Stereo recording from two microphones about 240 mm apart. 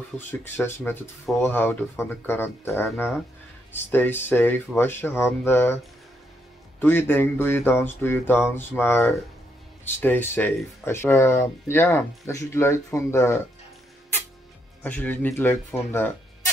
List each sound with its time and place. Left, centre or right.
0.3 s speech: centre
6.8 s speech: centre
14.8 s speech: centre